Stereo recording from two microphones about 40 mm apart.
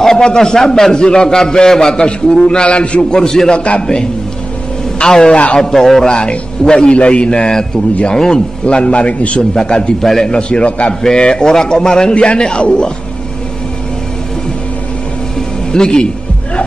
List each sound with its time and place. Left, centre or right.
0.0 s a man's voice: centre
3.1 s a man's voice: centre
3.5 s a man's voice: left; by 6.0 s centre
6.0 s a man's voice: left
10.0 s a man's voice: centre
10.3 s a man's voice: left
12.1 s a man's voice: left
15.7 s a man's voice: left